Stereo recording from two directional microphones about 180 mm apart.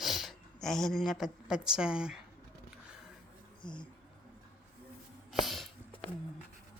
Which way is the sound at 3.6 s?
25° left (ahead or behind).